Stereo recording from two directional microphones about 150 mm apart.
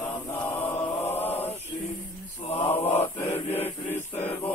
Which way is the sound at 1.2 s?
15° left (ahead or behind).